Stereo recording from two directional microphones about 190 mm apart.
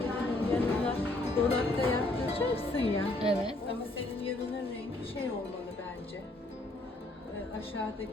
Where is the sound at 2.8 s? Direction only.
30° right (ahead or behind).